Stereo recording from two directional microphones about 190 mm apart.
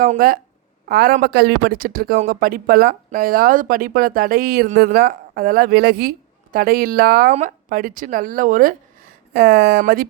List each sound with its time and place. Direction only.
0.0 s speech: 50° right (ahead or behind)
9.3 s speech: 60° right (ahead or behind)